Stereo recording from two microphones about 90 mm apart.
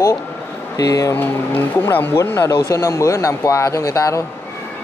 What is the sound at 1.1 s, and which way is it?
Speech, 25° left (ahead or behind).